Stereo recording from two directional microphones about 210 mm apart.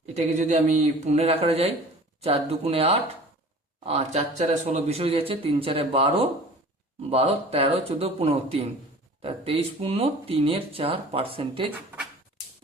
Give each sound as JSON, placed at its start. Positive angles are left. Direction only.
{"t": 0.0, "sound": "speech", "side_deg": -30}